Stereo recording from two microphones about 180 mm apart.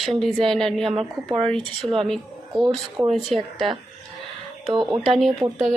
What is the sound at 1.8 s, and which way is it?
Speech, 15° right (ahead or behind).